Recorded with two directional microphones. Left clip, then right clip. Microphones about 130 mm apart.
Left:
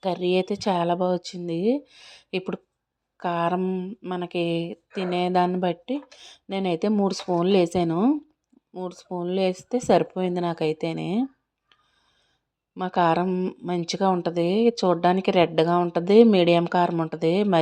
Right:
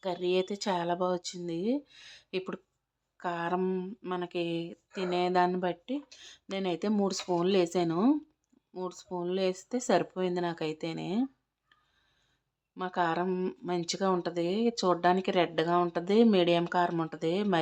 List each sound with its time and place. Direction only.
0.0 s speech: 35° left (ahead or behind)
3.6 s mantra: 15° left (ahead or behind)
4.1 s speech: 30° left (ahead or behind)
12.8 s a woman's voice: 40° left (ahead or behind)
13.2 s a woman's voice: 20° left (ahead or behind)